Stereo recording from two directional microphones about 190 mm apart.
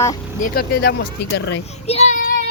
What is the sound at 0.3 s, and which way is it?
Speech, 50° left (ahead or behind).